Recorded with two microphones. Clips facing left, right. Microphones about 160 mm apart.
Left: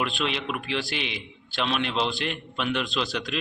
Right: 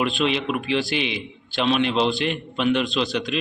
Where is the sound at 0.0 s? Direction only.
Centre (ahead or behind).